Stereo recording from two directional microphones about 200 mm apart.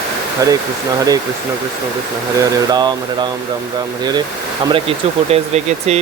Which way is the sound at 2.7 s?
20° right (ahead or behind).